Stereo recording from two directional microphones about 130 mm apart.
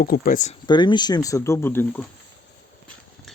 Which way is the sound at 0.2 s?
85° left.